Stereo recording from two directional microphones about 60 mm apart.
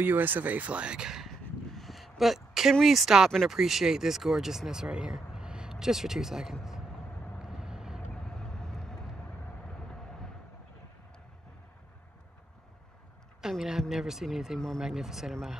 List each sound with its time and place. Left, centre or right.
0.0 s speech: right; by 1.3 s centre
1.8 s a sound: centre
2.8 s speech: centre
7.4 s vehicle: centre
8.1 s vehicle: centre
13.4 s speech: centre